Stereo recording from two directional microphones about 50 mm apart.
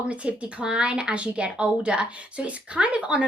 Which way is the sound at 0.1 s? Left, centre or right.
Right.